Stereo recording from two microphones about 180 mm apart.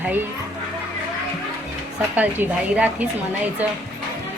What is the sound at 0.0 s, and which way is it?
Speech, 10° right (ahead or behind).